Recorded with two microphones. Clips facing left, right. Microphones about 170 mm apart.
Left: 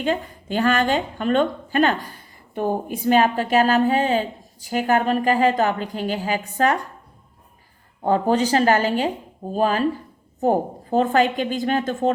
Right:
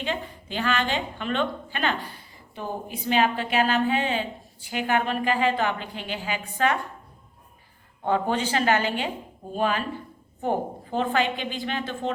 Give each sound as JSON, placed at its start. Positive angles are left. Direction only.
{"t": 0.0, "sound": "a woman's voice", "side_deg": 45}
{"t": 8.0, "sound": "a woman's voice", "side_deg": 40}